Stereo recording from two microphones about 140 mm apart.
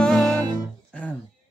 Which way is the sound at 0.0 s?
5° left (ahead or behind).